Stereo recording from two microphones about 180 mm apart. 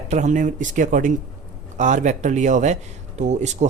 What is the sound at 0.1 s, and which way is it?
Speech, 40° right (ahead or behind).